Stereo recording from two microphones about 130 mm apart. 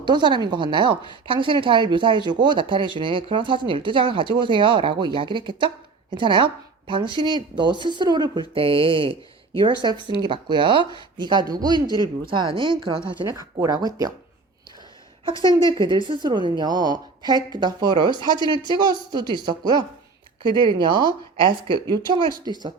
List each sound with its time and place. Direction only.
0.0 s speech: 35° right (ahead or behind)
13.2 s speech: 25° right (ahead or behind)
15.2 s a woman's voice: 40° right (ahead or behind)
20.5 s speech: 30° left (ahead or behind)
20.7 s speech: 35° right (ahead or behind)